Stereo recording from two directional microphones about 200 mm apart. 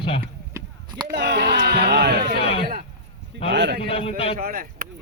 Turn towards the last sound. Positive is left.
turn(degrees=-45)  # may be behind; listen again after turning